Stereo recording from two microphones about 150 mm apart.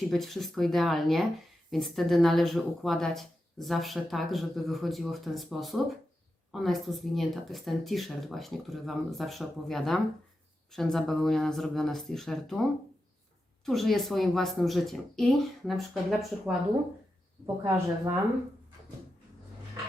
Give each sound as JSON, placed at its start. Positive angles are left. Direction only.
{"t": 0.1, "sound": "speech", "side_deg": 0}
{"t": 13.7, "sound": "speech", "side_deg": 0}
{"t": 17.4, "sound": "a woman's voice", "side_deg": -20}